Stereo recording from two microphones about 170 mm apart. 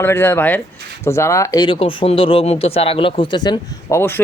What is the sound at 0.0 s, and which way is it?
Speech, 15° left (ahead or behind).